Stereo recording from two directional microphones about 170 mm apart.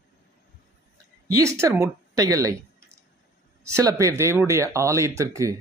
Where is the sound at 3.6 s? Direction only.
20° right (ahead or behind).